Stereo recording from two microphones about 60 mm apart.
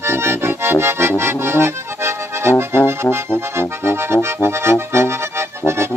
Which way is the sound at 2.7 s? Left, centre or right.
Right.